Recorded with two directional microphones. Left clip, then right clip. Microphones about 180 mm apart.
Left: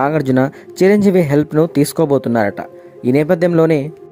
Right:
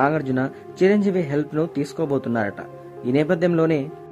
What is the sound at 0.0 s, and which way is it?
Speech, 50° left (ahead or behind).